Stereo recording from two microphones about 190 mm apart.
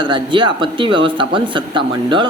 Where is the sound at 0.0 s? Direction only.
25° right (ahead or behind).